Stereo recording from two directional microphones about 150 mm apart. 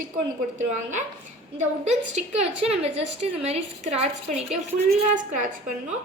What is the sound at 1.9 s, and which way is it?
A woman's voice, 45° right (ahead or behind).